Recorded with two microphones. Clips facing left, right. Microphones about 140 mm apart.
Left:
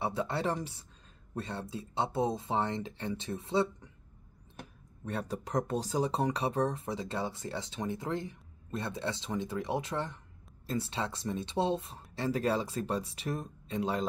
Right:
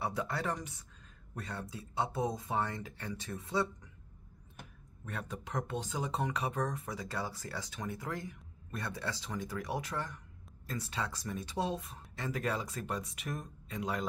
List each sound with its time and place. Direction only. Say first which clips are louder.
0.0 s speech: left 4 dB; 25° left (ahead or behind)
5.0 s speech: left 6 dB; 35° left (ahead or behind)